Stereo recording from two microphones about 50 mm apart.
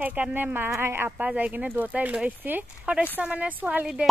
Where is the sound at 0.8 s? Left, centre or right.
Right.